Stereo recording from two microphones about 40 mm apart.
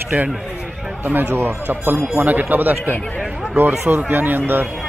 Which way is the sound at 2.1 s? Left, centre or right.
Right.